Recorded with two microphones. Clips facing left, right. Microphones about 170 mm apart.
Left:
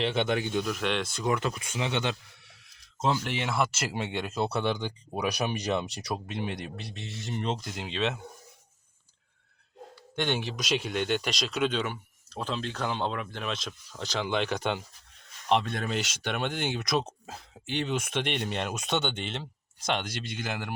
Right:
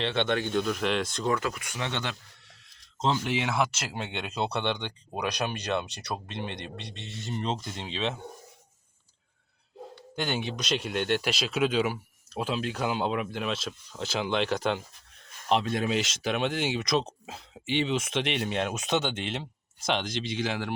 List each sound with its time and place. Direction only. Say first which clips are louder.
0.0 s speech: even; 10° left (ahead or behind)
1.2 s speech: even; 20° left (ahead or behind)
3.0 s speech: right 1 dB; 5° left (ahead or behind)
10.2 s speech: left 1 dB; centre (ahead or behind)